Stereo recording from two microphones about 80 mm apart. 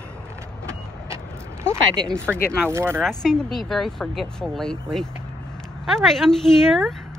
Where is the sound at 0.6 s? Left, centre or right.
Right.